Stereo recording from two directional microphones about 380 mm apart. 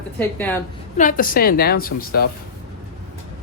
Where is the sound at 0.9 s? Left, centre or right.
Left.